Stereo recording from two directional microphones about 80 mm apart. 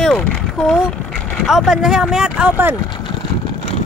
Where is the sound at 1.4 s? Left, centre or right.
Centre.